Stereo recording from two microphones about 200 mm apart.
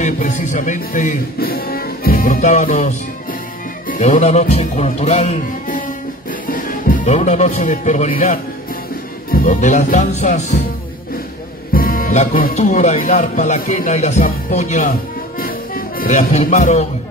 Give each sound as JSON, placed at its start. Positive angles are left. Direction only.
{"t": 0.0, "sound": "music", "side_deg": 35}
{"t": 3.8, "sound": "speech", "side_deg": 40}
{"t": 11.7, "sound": "speech", "side_deg": 45}